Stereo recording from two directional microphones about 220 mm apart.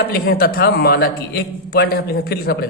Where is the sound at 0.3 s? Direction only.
45° left (ahead or behind).